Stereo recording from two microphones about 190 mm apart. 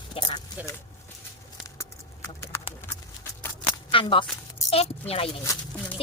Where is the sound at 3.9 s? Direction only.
25° left (ahead or behind).